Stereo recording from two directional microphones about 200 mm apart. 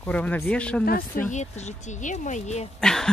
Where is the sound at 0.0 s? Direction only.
10° left (ahead or behind).